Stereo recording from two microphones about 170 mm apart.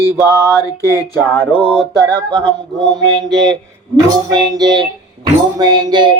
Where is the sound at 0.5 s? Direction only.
20° left (ahead or behind).